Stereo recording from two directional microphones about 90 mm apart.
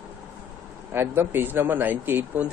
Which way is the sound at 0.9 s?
25° right (ahead or behind).